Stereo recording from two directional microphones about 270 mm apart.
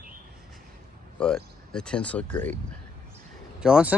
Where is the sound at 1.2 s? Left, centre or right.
Centre.